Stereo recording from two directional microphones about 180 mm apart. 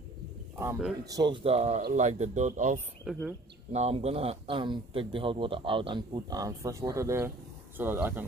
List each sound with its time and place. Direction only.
1.0 s a man's voice: 20° right (ahead or behind); by 2.8 s 45° right (ahead or behind)
3.1 s speech: 5° right (ahead or behind)
3.7 s a man's voice: 35° right (ahead or behind); by 8.2 s 10° right (ahead or behind)